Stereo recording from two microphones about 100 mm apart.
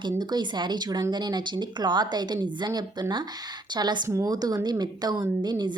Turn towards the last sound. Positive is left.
turn(degrees=-45)  # may be behind; listen again after turning